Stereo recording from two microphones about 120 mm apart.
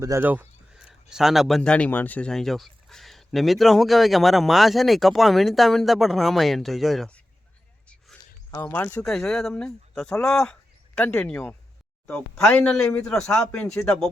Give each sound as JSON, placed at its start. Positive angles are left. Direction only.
{"t": 0.0, "sound": "speech", "side_deg": -25}
{"t": 0.3, "sound": "speech", "side_deg": -10}
{"t": 7.9, "sound": "a sound", "side_deg": 10}
{"t": 8.6, "sound": "speech", "side_deg": 15}
{"t": 9.0, "sound": "speech", "side_deg": 5}